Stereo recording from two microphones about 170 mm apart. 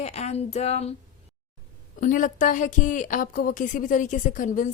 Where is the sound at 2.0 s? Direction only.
50° left (ahead or behind).